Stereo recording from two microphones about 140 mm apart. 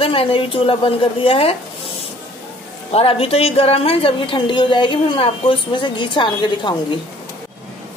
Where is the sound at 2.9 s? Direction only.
45° left (ahead or behind).